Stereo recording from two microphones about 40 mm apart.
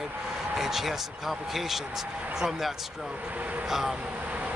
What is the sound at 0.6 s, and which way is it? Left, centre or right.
Speech, centre.